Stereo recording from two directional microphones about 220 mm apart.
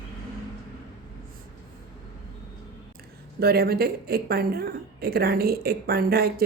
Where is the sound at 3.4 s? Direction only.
45° right (ahead or behind).